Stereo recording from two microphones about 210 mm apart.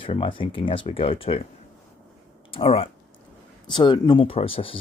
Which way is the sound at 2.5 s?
25° left (ahead or behind).